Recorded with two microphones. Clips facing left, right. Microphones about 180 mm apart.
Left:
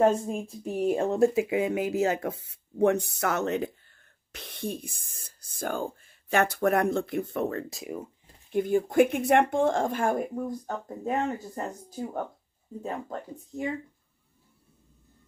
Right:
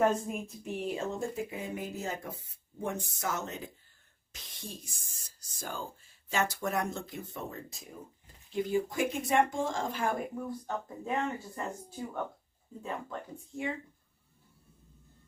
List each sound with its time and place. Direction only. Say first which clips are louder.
0.0 s speech: left 5 dB; 30° left (ahead or behind); by 8.5 s 90° left
8.5 s speech: left 8 dB; 50° left (ahead or behind)